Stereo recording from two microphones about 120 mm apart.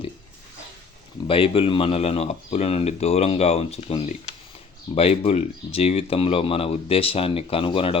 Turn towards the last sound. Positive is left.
turn(degrees=50)  # may be behind; listen again after turning